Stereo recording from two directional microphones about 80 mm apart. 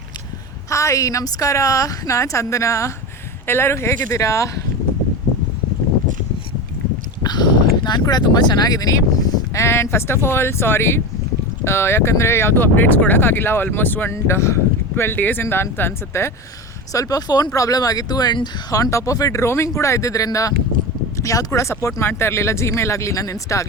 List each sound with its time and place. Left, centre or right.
0.7 s speech: left
7.2 s speech: left
9.6 s speech: left
14.1 s speech: left
16.9 s speech: left
18.7 s speech: left